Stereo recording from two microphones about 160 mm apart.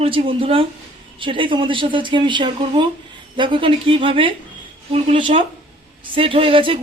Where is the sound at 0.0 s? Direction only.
35° right (ahead or behind).